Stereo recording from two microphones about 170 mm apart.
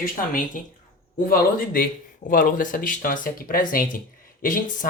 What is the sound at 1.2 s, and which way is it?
Speech, 55° left (ahead or behind).